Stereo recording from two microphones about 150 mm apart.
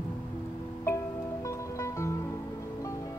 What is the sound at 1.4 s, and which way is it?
Music, 20° left (ahead or behind).